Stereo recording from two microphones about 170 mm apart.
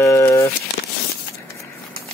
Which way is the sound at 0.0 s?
15° left (ahead or behind).